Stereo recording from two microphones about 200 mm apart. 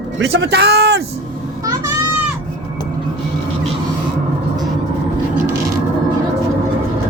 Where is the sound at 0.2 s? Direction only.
65° right (ahead or behind).